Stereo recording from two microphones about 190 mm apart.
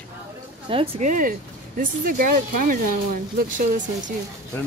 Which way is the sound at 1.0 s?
45° right (ahead or behind).